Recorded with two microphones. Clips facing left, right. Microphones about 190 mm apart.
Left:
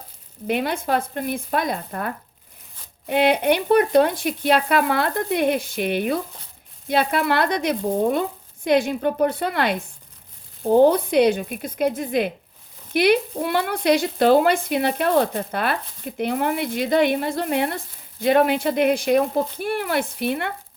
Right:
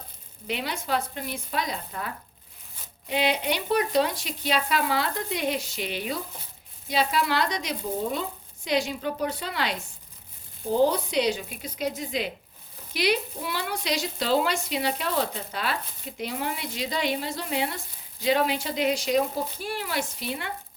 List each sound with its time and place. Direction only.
0.4 s speech: 55° left (ahead or behind)